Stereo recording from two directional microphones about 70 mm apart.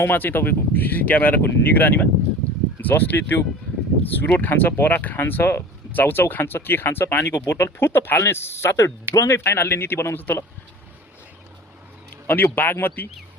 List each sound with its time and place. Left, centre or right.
0.0 s speech: left
12.1 s a sound: left
12.5 s speech: left